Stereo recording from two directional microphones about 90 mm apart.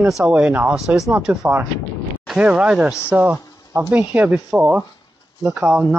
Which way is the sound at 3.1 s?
20° right (ahead or behind).